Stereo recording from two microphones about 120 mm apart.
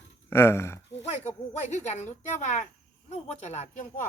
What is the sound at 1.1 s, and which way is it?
Speech, 70° left (ahead or behind).